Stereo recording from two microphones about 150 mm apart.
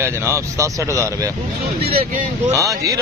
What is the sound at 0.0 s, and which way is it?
A man's voice, 15° right (ahead or behind).